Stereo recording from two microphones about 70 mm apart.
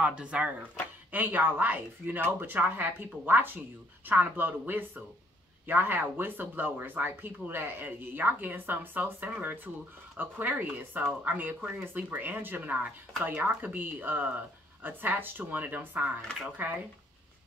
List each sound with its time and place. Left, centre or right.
0.0 s speech: centre